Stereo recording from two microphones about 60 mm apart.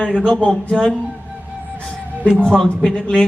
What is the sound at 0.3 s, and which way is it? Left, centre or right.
Music, centre.